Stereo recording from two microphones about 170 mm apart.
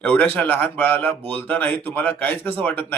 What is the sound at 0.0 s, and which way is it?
Speech, 10° left (ahead or behind).